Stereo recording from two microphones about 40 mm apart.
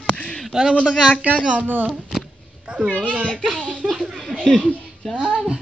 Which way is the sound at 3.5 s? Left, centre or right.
Left.